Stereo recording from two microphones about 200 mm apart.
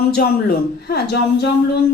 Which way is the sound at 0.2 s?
50° left (ahead or behind).